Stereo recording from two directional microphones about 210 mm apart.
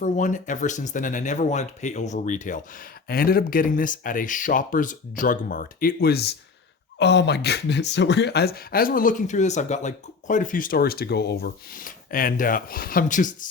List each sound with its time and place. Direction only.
0.0 s speech: 35° left (ahead or behind)